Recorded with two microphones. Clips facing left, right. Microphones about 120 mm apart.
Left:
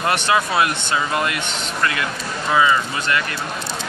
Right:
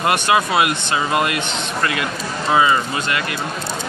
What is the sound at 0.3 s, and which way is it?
Speech, 15° right (ahead or behind).